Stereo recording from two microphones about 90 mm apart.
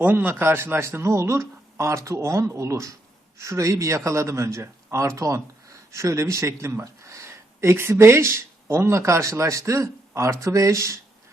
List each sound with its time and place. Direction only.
0.0 s speech: 20° right (ahead or behind)